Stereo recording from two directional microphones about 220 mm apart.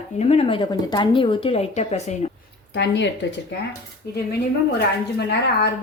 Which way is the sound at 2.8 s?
55° left (ahead or behind).